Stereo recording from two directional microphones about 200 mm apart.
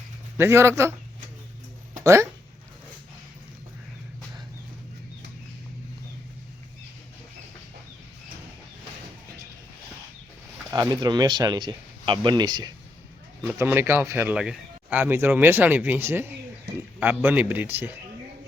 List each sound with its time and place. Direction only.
0.3 s a man's voice: 15° right (ahead or behind)
1.9 s a sound: 15° right (ahead or behind)
10.7 s speech: 20° right (ahead or behind)
13.4 s a man's voice: 10° right (ahead or behind)